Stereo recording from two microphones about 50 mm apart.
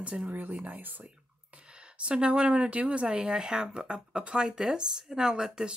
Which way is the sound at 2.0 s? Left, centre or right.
Right.